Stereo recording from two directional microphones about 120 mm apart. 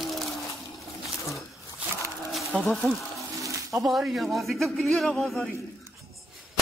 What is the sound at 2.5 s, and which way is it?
Speech, 5° left (ahead or behind).